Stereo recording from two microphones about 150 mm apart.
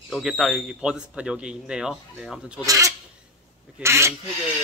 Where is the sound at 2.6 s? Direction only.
20° right (ahead or behind).